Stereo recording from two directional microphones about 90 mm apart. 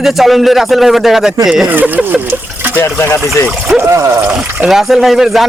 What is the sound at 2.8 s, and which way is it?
Speech, 30° left (ahead or behind).